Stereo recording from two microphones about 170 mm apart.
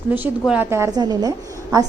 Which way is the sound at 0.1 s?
10° right (ahead or behind).